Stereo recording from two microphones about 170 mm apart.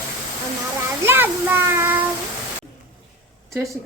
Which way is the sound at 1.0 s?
10° right (ahead or behind).